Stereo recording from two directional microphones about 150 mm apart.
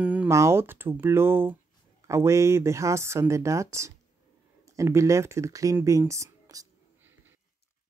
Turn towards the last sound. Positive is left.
turn(degrees=-20)  # may be behind; listen again after turning